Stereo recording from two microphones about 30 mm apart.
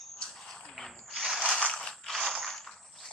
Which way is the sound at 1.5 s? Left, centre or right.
Left.